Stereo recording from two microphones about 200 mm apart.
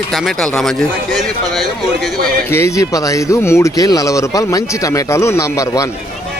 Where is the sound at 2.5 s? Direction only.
15° left (ahead or behind).